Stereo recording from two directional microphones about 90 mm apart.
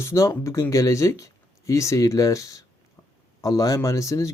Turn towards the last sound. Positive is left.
turn(degrees=35)  # may be behind; listen again after turning